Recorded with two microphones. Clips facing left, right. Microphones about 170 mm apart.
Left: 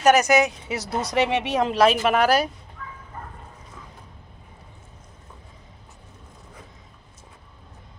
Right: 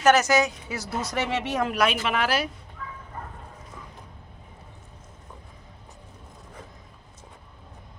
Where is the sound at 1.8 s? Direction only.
40° left (ahead or behind).